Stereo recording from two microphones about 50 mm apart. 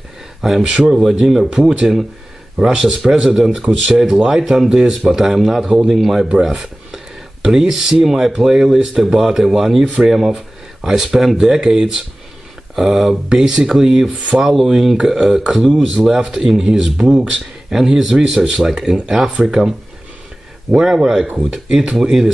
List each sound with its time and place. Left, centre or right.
0.4 s speech: centre
0.7 s speech: right
1.0 s speech: centre
1.5 s speech: centre
6.4 s cutlery: centre
7.4 s speech: centre
20.7 s speech: centre
21.3 s speech: right
21.6 s speech: centre
21.9 s speech: centre